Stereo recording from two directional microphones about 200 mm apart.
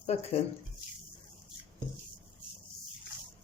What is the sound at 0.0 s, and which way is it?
Speech, 30° left (ahead or behind).